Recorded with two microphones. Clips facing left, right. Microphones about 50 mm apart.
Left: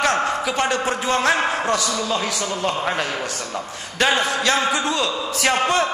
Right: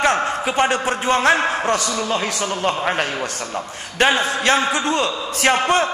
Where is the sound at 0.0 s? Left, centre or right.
Right.